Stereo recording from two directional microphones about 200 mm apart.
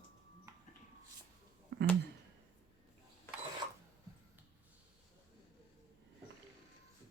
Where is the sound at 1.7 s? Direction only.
60° right (ahead or behind).